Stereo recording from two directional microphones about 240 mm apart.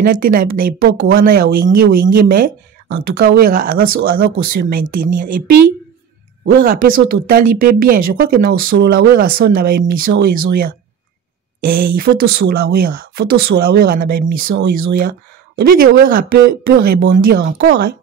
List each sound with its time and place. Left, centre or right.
0.0 s speech: right
6.4 s speech: right